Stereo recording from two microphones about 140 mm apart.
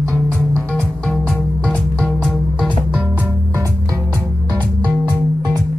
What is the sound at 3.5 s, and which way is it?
Music, 20° right (ahead or behind).